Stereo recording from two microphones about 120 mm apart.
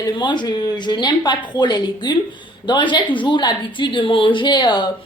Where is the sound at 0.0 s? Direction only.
40° left (ahead or behind).